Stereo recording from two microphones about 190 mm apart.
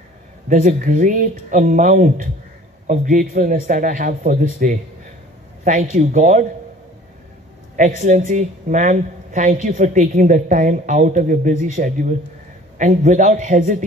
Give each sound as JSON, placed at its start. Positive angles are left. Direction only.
{"t": 0.5, "sound": "a man's voice", "side_deg": -40}
{"t": 7.7, "sound": "speech", "side_deg": -40}